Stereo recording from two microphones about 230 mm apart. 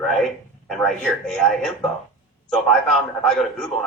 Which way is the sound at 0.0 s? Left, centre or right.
Centre.